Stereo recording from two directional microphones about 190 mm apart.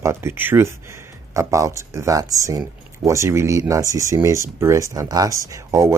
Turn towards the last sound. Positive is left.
turn(degrees=-15)  # may be behind; listen again after turning